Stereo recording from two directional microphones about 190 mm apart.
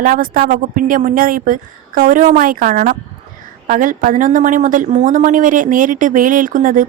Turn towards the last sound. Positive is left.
turn(degrees=-45)  # may be behind; listen again after turning